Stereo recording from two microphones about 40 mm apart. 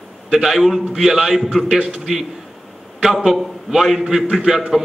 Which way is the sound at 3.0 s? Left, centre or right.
Centre.